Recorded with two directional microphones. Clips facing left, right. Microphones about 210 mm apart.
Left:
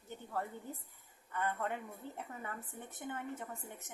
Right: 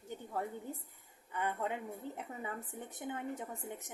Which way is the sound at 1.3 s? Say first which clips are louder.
Right 1 dB; 15° right (ahead or behind).